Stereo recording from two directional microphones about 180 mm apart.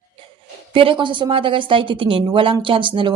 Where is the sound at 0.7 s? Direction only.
30° right (ahead or behind).